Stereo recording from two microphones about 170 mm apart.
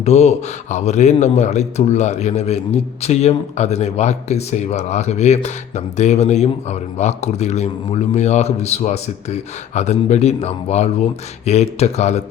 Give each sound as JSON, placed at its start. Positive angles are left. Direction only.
{"t": 0.0, "sound": "speech", "side_deg": 40}